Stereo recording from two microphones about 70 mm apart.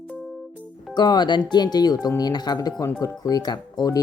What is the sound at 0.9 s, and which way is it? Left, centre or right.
Speech, left.